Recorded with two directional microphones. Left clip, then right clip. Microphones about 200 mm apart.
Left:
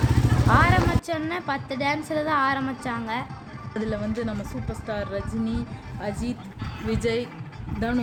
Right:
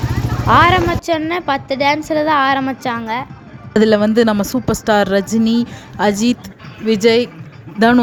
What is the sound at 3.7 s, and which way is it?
A woman's voice, 50° right (ahead or behind).